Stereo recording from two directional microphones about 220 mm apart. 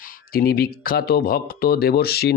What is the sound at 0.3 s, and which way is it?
A man's voice, 45° left (ahead or behind).